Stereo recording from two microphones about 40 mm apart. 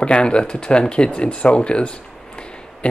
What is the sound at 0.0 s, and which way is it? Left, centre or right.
Speech, left.